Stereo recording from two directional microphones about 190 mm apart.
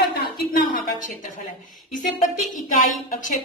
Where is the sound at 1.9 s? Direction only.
40° left (ahead or behind).